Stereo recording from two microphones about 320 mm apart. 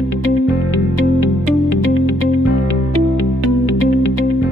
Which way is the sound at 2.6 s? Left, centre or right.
Left.